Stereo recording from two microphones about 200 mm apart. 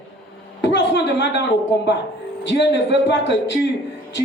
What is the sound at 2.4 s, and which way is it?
Speech, 60° left (ahead or behind).